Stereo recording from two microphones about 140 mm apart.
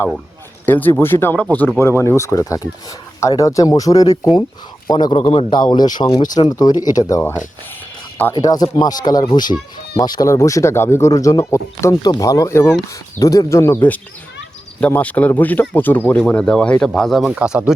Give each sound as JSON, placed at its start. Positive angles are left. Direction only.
{"t": 0.6, "sound": "speech", "side_deg": 15}
{"t": 5.1, "sound": "a man's voice", "side_deg": 40}